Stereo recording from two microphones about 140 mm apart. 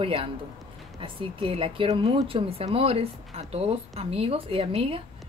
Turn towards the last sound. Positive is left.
turn(degrees=-40)  # may be behind; listen again after turning